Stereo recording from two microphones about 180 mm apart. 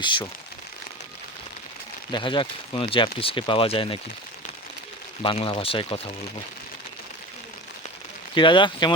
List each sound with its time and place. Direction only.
0.0 s speech: 25° left (ahead or behind)
2.1 s speech: 25° left (ahead or behind)
5.2 s speech: 30° left (ahead or behind)
8.4 s speech: 25° left (ahead or behind)